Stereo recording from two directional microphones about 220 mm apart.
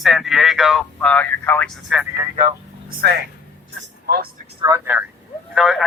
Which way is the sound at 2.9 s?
40° right (ahead or behind).